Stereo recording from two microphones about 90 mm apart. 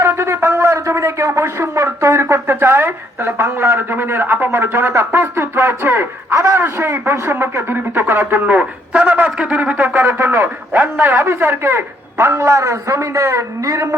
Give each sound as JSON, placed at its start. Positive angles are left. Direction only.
{"t": 0.0, "sound": "speech", "side_deg": -25}
{"t": 10.0, "sound": "speech", "side_deg": -25}